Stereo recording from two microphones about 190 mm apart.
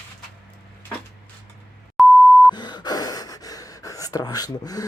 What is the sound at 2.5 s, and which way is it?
Gasp, 20° left (ahead or behind).